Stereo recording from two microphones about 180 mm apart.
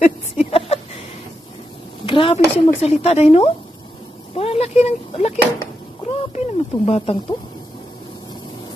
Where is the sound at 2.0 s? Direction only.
30° left (ahead or behind).